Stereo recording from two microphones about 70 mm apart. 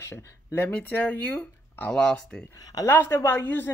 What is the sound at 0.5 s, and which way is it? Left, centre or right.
Speech, left.